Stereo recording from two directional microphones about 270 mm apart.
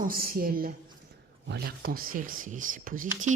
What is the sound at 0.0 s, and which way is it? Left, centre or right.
A man's voice, right.